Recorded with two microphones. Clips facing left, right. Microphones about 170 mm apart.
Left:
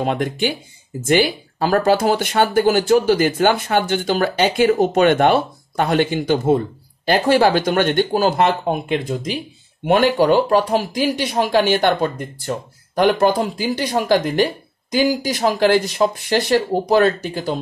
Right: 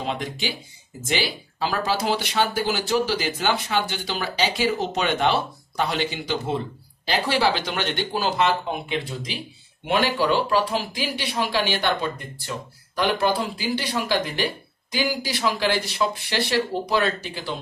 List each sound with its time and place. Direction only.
0.0 s speech: 55° left (ahead or behind)